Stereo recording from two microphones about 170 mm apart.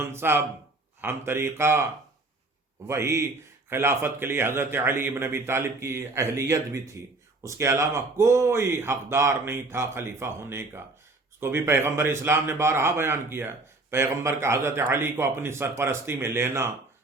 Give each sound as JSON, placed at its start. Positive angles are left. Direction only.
{"t": 0.0, "sound": "speech", "side_deg": -15}
{"t": 2.8, "sound": "speech", "side_deg": -15}